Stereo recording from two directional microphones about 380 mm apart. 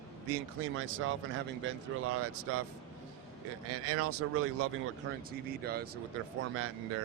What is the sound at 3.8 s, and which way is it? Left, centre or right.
Speech, right.